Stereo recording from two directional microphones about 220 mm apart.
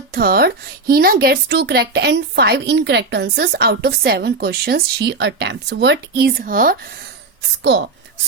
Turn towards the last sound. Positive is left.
turn(degrees=-50)  # may be behind; listen again after turning